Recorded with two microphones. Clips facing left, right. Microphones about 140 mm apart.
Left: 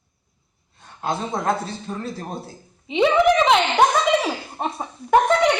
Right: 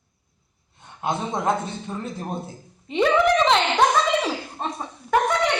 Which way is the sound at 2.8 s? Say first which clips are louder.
Left 2 dB; 5° left (ahead or behind).